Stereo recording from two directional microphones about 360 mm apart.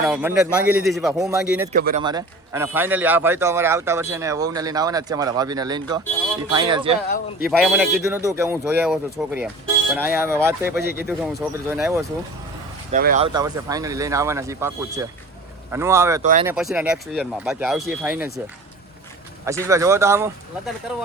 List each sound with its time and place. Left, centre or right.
0.0 s speech: centre
1.7 s speech: right
2.0 s a man's voice: centre
7.4 s a man's voice: centre
12.9 s a man's voice: right
16.2 s speech: right
16.5 s speech: centre
19.6 s a man's voice: centre